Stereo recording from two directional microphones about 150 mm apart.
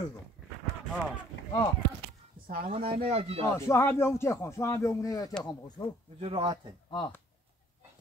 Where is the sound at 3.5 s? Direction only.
20° left (ahead or behind).